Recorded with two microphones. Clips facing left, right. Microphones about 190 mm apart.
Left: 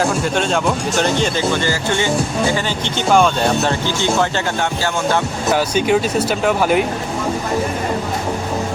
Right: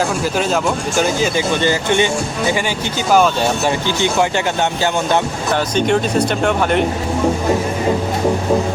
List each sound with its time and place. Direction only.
0.0 s speech: 5° right (ahead or behind)
3.7 s speech: 15° right (ahead or behind)
5.5 s speech: 5° left (ahead or behind)